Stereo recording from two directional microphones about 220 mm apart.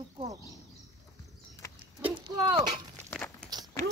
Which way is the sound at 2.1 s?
20° right (ahead or behind).